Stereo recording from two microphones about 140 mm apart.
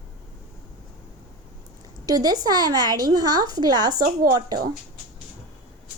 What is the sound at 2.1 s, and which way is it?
A woman's voice, 25° right (ahead or behind).